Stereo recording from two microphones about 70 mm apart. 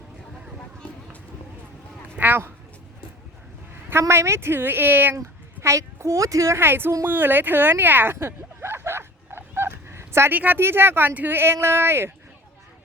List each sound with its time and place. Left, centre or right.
2.1 s speech: right
4.1 s speech: right
5.2 s speech: right
6.6 s speech: right
7.0 s a sound: right
10.3 s speech: right